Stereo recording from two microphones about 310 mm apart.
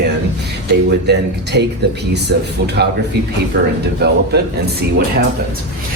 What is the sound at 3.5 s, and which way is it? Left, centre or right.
Speech, right.